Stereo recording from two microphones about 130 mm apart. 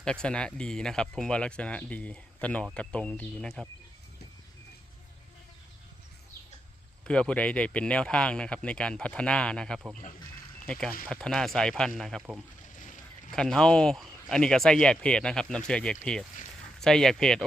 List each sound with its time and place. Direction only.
0.0 s speech: 5° left (ahead or behind)
7.1 s speech: 10° left (ahead or behind)
12.6 s boat: 75° left (ahead or behind)
13.3 s speech: 5° left (ahead or behind)